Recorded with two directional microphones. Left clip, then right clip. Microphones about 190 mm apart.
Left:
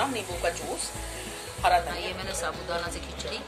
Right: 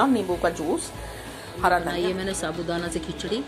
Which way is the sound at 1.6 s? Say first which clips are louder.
Right 2 dB; 15° right (ahead or behind).